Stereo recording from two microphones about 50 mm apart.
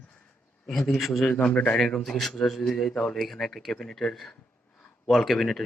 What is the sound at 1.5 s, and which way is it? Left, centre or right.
Speech, left.